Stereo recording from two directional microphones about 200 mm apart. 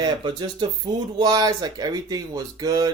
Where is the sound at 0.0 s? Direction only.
20° right (ahead or behind).